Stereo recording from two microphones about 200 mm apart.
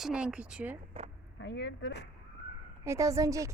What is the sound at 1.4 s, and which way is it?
Speech, 60° left (ahead or behind).